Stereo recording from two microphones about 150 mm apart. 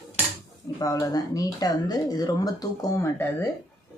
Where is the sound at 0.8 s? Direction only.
20° left (ahead or behind).